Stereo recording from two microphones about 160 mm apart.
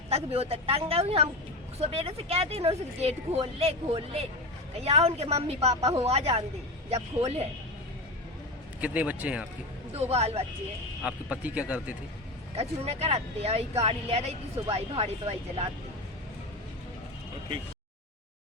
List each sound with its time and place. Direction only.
0.1 s speech: 40° right (ahead or behind)
8.8 s speech: 10° right (ahead or behind)
9.9 s speech: 40° right (ahead or behind)
11.0 s speech: 10° right (ahead or behind)
12.5 s speech: 40° right (ahead or behind)